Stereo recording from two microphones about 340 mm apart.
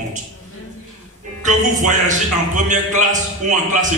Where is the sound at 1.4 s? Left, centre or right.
Right.